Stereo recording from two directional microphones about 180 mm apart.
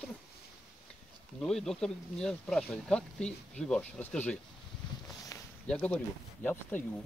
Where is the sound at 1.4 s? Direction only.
Centre (ahead or behind).